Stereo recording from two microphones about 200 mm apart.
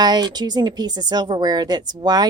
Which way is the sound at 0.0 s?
20° right (ahead or behind).